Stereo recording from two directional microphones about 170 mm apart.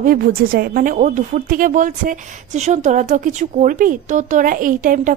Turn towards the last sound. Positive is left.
turn(degrees=-50)  # may be behind; listen again after turning